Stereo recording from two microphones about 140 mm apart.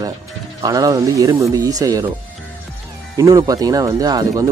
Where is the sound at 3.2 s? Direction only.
25° right (ahead or behind).